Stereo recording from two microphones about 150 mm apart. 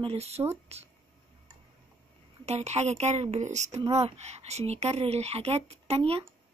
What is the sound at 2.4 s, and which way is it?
Speech, 45° right (ahead or behind).